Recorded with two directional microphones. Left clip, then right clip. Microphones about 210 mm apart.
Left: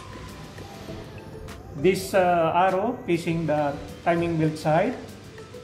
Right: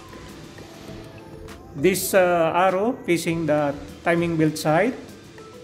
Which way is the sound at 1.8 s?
50° right (ahead or behind).